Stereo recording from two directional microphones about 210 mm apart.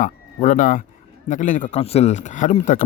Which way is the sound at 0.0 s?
35° left (ahead or behind).